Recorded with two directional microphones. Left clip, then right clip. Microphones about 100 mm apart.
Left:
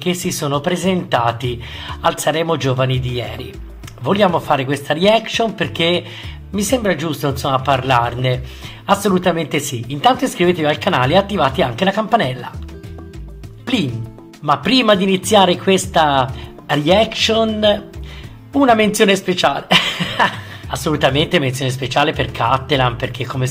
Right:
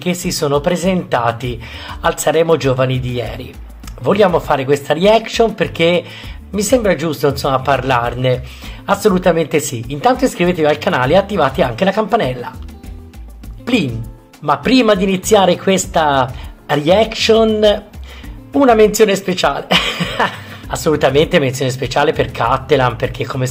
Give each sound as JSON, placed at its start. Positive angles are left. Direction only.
{"t": 0.0, "sound": "speech", "side_deg": -30}
{"t": 14.4, "sound": "speech", "side_deg": -30}